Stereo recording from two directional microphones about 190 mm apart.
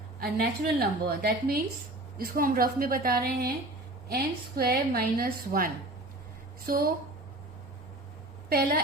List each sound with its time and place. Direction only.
0.2 s a woman's voice: 55° right (ahead or behind)
8.4 s a woman's voice: 55° right (ahead or behind)